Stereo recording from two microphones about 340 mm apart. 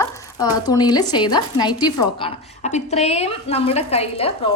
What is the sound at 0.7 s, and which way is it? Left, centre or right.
A woman's voice, centre.